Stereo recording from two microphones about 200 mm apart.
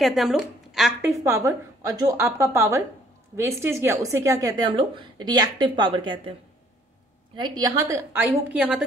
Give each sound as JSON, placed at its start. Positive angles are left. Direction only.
{"t": 0.0, "sound": "speech", "side_deg": 0}
{"t": 1.2, "sound": "a woman's voice", "side_deg": -15}
{"t": 7.3, "sound": "a woman's voice", "side_deg": -20}